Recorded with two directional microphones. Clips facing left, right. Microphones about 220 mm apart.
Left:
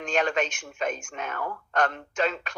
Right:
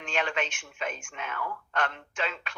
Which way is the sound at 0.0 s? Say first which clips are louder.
Left 5 dB; 40° left (ahead or behind).